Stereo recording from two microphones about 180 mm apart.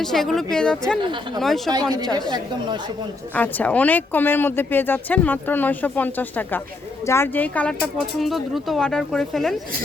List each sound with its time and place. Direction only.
0.0 s speech: centre (ahead or behind)
2.1 s a woman's voice: 25° right (ahead or behind)
3.3 s speech: 10° left (ahead or behind)